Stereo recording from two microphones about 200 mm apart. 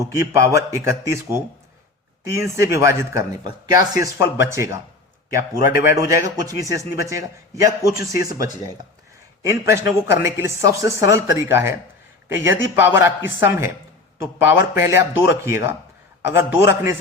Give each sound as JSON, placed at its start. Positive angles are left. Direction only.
{"t": 0.0, "sound": "a man's voice", "side_deg": -15}
{"t": 9.4, "sound": "a man's voice", "side_deg": -15}
{"t": 14.8, "sound": "a man's voice", "side_deg": -10}